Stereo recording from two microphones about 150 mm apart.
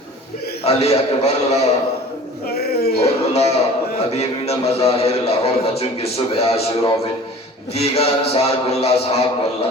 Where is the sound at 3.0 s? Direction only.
45° left (ahead or behind).